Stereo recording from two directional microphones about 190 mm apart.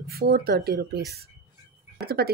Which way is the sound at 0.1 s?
55° right (ahead or behind).